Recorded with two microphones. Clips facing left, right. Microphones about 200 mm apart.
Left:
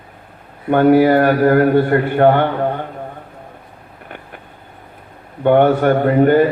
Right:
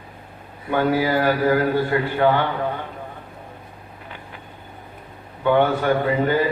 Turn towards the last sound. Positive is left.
turn(degrees=55)  # may be behind; listen again after turning